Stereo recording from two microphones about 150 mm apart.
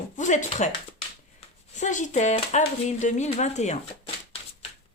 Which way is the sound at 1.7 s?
55° left (ahead or behind).